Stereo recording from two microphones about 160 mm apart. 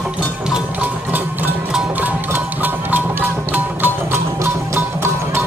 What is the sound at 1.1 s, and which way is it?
Music, 10° right (ahead or behind).